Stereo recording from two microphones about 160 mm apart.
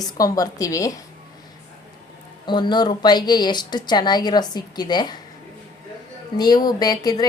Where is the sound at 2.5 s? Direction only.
30° left (ahead or behind).